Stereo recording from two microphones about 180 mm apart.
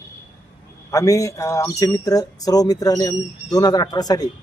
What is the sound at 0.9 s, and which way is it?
Speech, 20° left (ahead or behind).